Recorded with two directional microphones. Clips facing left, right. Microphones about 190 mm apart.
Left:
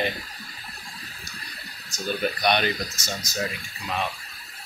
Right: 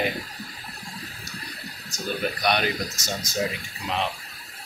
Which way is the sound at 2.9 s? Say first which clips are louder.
Right 2 dB; 50° right (ahead or behind).